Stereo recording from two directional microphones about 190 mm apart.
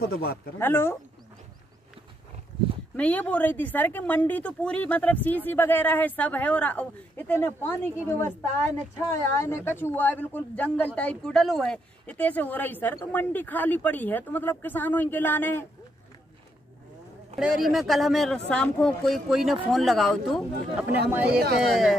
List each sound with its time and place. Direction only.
0.0 s speech: 55° left (ahead or behind)
0.6 s speech: 10° left (ahead or behind)
3.0 s speech: 10° left (ahead or behind)
17.4 s a woman's voice: centre (ahead or behind)
21.3 s speech: 55° right (ahead or behind)
21.6 s a woman's voice: centre (ahead or behind)